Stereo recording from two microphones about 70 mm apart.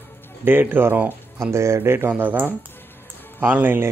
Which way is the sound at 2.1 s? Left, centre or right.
Right.